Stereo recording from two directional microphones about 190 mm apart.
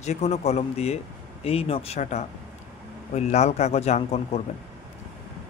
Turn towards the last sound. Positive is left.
turn(degrees=35)  # may be behind; listen again after turning